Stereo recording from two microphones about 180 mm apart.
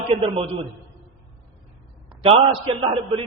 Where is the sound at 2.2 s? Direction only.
30° right (ahead or behind).